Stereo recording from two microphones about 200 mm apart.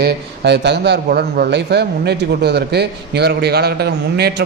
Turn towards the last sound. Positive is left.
turn(degrees=-55)  # may be behind; listen again after turning